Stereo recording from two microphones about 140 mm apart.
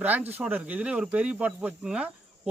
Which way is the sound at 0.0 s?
10° right (ahead or behind).